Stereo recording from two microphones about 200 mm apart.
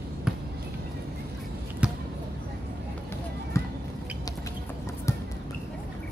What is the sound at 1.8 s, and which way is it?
Basketball bounce, 5° right (ahead or behind).